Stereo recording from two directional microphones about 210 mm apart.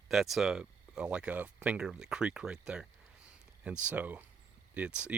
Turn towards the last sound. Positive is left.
turn(degrees=-5)  # may be behind; listen again after turning